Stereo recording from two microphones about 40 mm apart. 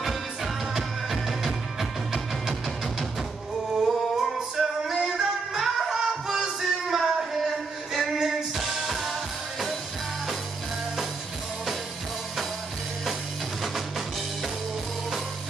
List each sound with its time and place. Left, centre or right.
0.0 s music: centre
3.8 s singing: centre
4.9 s music: centre
13.6 s music: centre